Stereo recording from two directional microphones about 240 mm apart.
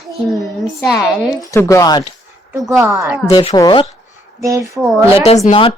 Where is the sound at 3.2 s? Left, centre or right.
Left.